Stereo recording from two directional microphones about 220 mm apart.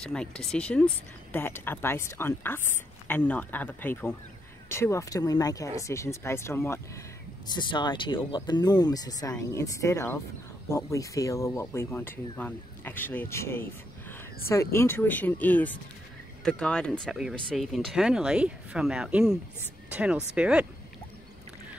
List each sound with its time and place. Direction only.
0.0 s speech: 5° left (ahead or behind)